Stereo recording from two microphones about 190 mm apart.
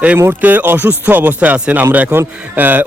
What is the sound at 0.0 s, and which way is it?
Speech, 10° right (ahead or behind).